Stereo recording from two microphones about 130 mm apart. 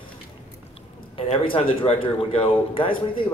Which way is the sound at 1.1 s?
45° left (ahead or behind).